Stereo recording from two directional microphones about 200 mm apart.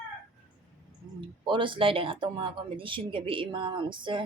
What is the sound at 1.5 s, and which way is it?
Speech, 25° right (ahead or behind).